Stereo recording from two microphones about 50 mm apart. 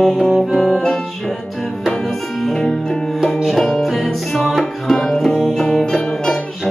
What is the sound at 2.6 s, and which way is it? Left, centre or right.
Music, centre.